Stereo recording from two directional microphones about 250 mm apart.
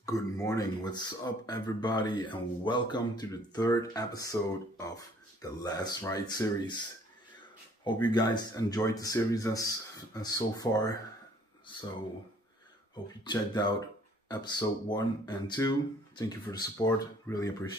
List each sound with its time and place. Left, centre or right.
0.0 s speech: centre
7.8 s speech: centre
13.2 s speech: centre